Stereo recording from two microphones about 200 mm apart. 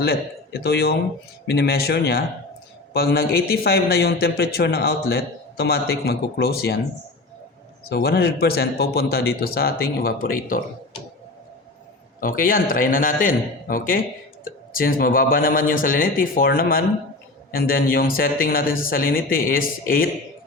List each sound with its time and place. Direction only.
0.6 s a man's voice: 55° left (ahead or behind)
7.9 s a man's voice: 50° left (ahead or behind)
12.2 s a man's voice: 45° left (ahead or behind)